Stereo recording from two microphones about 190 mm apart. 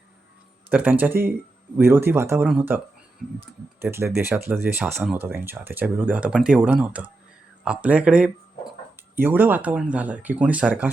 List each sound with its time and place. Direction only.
0.7 s speech: 10° right (ahead or behind)